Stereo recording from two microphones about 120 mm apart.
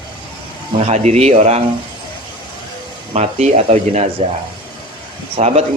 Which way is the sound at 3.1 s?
65° right (ahead or behind).